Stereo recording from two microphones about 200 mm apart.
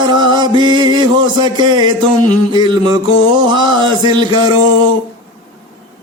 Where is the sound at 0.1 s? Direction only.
20° right (ahead or behind).